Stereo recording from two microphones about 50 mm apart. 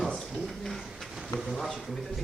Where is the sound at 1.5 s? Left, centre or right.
Centre.